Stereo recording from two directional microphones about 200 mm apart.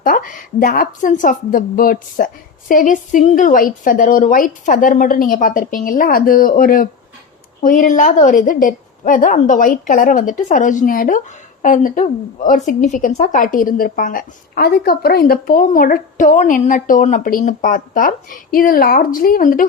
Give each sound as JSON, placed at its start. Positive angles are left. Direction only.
{"t": 0.0, "sound": "a woman's voice", "side_deg": 45}